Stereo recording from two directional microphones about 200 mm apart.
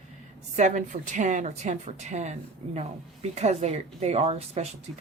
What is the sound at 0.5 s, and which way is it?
Speech, 40° right (ahead or behind).